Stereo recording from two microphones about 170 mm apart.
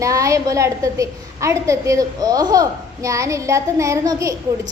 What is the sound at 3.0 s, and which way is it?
Child singing, 20° right (ahead or behind).